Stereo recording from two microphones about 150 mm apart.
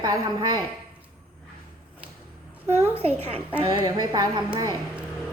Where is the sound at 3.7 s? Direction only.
30° right (ahead or behind).